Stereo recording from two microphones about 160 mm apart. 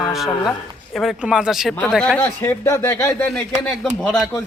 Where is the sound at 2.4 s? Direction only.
15° left (ahead or behind).